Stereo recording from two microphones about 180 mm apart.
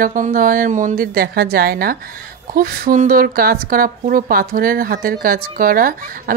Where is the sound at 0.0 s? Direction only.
50° right (ahead or behind).